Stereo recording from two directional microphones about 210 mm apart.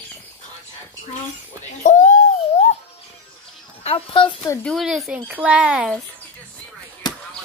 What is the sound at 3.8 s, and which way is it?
Speech, 25° left (ahead or behind).